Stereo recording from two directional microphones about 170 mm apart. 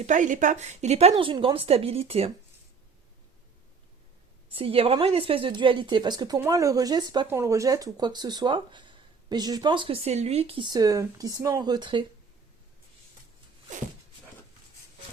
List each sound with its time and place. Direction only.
0.0 s speech: 45° right (ahead or behind)
4.5 s speech: 35° right (ahead or behind)